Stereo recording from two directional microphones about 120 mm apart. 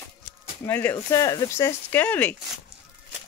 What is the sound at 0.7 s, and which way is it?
Speech, 20° left (ahead or behind).